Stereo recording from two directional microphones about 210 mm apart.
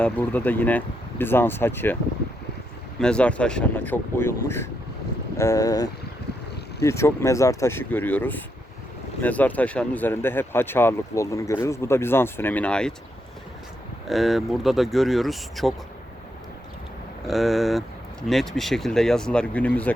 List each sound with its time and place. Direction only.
0.0 s speech: 5° left (ahead or behind)
3.0 s speech: 5° left (ahead or behind)
14.1 s speech: centre (ahead or behind)
17.2 s speech: centre (ahead or behind)